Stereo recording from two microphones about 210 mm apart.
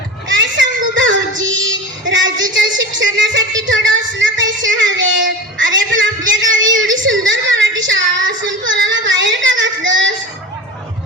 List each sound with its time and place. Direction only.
0.3 s child singing: 60° right (ahead or behind)
6.7 s a sound: 65° right (ahead or behind)
8.2 s child singing: 60° right (ahead or behind)